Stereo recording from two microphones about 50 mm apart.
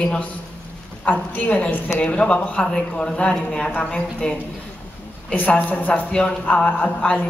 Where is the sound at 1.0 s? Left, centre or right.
Left.